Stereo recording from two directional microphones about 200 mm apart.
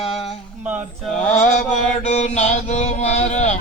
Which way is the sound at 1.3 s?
35° left (ahead or behind).